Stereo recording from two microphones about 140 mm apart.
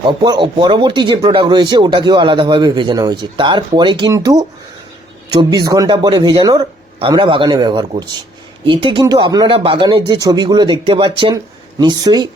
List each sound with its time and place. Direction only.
0.2 s speech: 30° right (ahead or behind)